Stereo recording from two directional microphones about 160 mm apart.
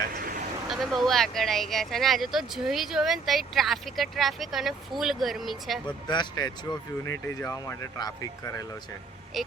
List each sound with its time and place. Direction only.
0.2 s vehicle: 60° right (ahead or behind)
0.7 s speech: centre (ahead or behind)
6.1 s speech: 25° left (ahead or behind)